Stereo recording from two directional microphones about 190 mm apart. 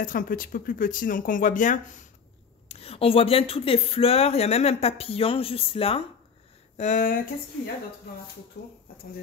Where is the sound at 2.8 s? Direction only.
30° left (ahead or behind).